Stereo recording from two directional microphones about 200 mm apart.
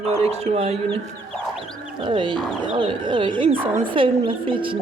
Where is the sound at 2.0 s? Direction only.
25° right (ahead or behind).